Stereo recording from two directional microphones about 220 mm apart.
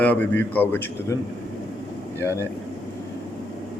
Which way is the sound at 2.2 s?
10° left (ahead or behind).